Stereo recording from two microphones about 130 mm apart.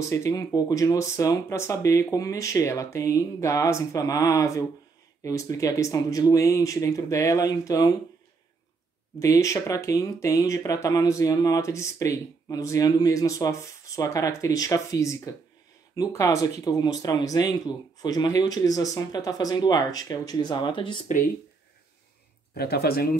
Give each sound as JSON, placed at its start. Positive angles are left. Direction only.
{"t": 0.0, "sound": "speech", "side_deg": 25}
{"t": 9.2, "sound": "speech", "side_deg": 25}